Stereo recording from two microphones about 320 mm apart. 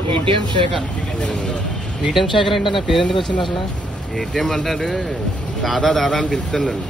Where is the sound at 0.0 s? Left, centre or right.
Centre.